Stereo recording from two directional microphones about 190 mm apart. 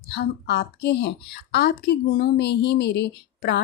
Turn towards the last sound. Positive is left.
turn(degrees=60)  # may be behind; listen again after turning